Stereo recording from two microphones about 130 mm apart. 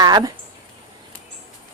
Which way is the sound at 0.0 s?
30° right (ahead or behind).